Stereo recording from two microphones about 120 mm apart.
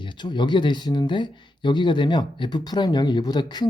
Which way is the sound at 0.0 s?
40° left (ahead or behind).